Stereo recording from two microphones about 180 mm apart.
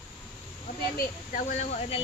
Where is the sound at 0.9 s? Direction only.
45° left (ahead or behind).